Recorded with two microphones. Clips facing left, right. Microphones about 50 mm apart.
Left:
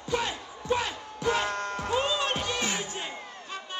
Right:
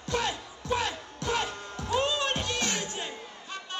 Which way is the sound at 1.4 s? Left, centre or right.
Left.